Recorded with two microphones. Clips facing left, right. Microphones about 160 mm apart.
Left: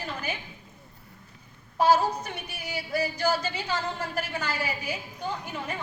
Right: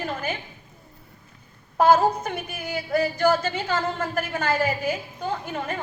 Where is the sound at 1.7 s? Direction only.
50° right (ahead or behind).